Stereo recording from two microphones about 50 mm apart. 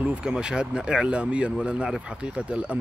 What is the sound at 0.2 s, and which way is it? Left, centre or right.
Speech, centre.